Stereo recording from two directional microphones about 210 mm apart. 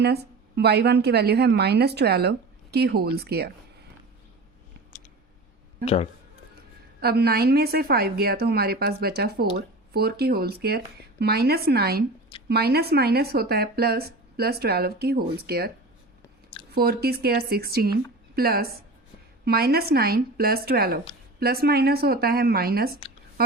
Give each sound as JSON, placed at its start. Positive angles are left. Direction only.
{"t": 0.0, "sound": "speech", "side_deg": -50}
{"t": 5.8, "sound": "a man's voice", "side_deg": 30}
{"t": 7.0, "sound": "speech", "side_deg": -50}
{"t": 16.7, "sound": "speech", "side_deg": -50}